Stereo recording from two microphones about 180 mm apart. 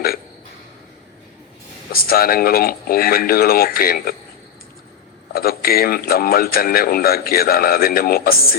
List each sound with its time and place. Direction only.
1.9 s speech: 55° left (ahead or behind)
5.3 s speech: 55° left (ahead or behind)